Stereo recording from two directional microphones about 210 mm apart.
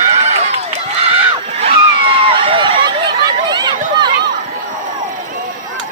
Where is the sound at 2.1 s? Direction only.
25° right (ahead or behind).